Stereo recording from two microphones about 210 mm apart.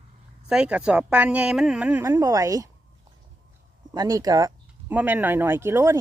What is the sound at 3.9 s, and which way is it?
Speech, 15° right (ahead or behind).